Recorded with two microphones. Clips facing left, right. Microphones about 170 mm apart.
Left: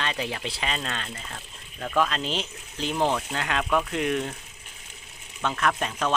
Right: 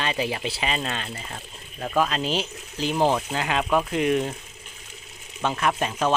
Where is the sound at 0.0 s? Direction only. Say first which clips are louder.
Right 4 dB; 10° right (ahead or behind).